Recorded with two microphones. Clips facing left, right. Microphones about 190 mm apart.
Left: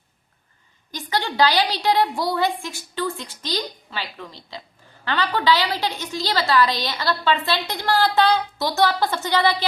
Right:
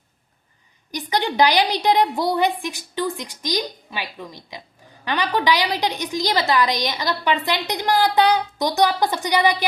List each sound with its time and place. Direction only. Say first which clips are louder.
0.9 s a woman's voice: right 3 dB; 15° right (ahead or behind)